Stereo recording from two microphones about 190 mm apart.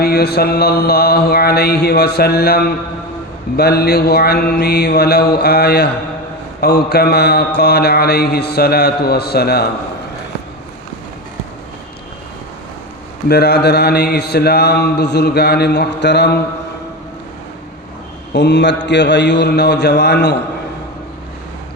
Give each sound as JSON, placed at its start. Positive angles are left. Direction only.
{"t": 0.0, "sound": "speech", "side_deg": 55}
{"t": 13.2, "sound": "speech", "side_deg": 60}
{"t": 18.3, "sound": "speech", "side_deg": 65}